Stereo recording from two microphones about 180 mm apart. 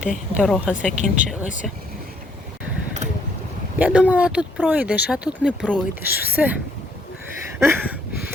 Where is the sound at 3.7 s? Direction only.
10° right (ahead or behind).